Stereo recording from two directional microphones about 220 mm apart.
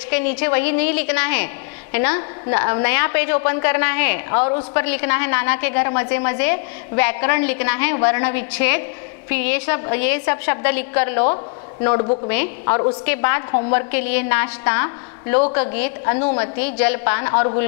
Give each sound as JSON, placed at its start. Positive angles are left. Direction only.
{"t": 0.1, "sound": "a woman's voice", "side_deg": 10}
{"t": 11.8, "sound": "speech", "side_deg": 25}
{"t": 12.3, "sound": "a woman's voice", "side_deg": 15}
{"t": 16.1, "sound": "speech", "side_deg": 30}
{"t": 16.3, "sound": "a woman's voice", "side_deg": 10}